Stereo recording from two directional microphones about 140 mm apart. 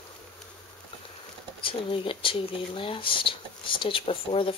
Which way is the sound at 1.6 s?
40° left (ahead or behind).